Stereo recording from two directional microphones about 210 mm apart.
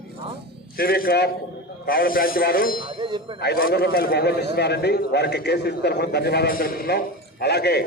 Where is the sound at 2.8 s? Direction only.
25° right (ahead or behind).